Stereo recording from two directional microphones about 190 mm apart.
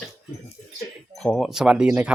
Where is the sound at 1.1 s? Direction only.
5° left (ahead or behind).